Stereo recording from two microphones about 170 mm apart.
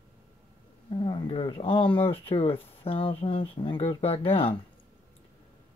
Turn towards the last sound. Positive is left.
turn(degrees=35)  # may be behind; listen again after turning